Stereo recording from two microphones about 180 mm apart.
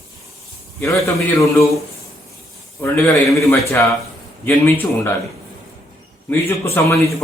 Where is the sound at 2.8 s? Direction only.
10° left (ahead or behind).